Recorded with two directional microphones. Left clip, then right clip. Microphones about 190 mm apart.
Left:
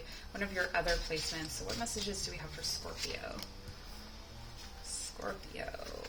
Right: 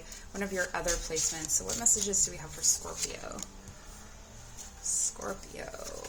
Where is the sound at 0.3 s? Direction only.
50° right (ahead or behind).